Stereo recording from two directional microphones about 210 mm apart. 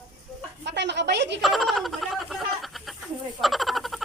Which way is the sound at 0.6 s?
55° right (ahead or behind).